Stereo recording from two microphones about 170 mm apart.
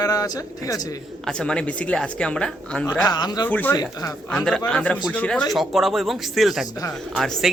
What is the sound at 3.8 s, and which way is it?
Speech, 20° left (ahead or behind).